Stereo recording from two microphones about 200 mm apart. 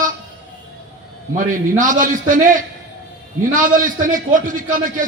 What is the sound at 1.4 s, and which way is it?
A man's voice, 40° right (ahead or behind).